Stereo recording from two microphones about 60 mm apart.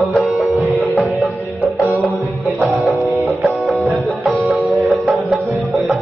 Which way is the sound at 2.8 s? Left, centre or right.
Left.